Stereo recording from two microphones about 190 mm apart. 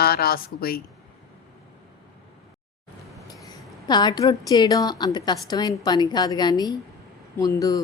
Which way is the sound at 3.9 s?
20° left (ahead or behind).